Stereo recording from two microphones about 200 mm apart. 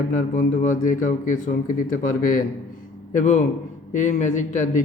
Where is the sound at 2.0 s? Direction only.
45° left (ahead or behind).